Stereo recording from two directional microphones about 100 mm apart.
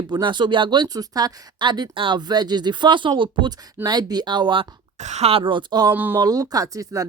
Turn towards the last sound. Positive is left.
turn(degrees=-35)  # may be behind; listen again after turning